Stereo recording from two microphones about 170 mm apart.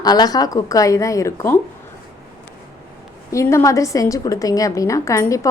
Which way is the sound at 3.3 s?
15° left (ahead or behind).